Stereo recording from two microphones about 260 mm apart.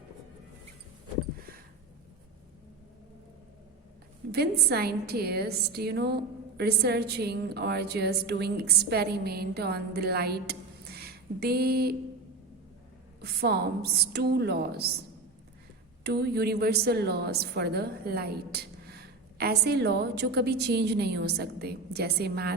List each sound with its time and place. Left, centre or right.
4.3 s a woman's voice: right
13.2 s a woman's voice: right
16.0 s a woman's voice: right